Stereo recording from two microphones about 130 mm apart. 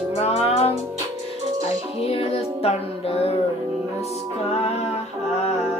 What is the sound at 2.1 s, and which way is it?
Child singing, 50° left (ahead or behind).